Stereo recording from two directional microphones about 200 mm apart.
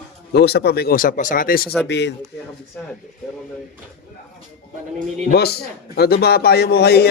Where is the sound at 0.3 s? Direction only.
55° left (ahead or behind).